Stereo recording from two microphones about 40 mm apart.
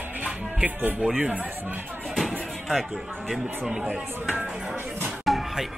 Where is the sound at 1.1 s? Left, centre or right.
Right.